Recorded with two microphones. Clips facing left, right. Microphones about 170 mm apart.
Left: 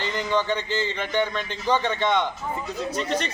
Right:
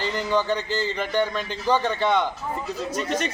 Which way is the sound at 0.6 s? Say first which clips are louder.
Even; 35° right (ahead or behind).